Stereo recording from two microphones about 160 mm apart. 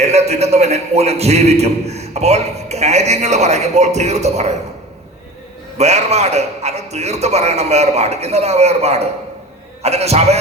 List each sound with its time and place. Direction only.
0.0 s a man's voice: 40° right (ahead or behind)
5.7 s a man's voice: 45° right (ahead or behind)